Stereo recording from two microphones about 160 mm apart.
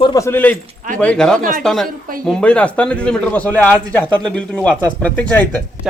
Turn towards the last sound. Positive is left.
turn(degrees=10)  # may be behind; listen again after turning